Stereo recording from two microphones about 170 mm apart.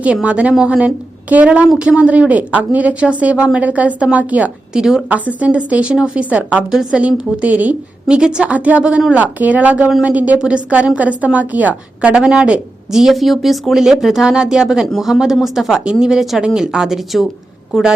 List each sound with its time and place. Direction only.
0.0 s a woman's voice: 5° right (ahead or behind)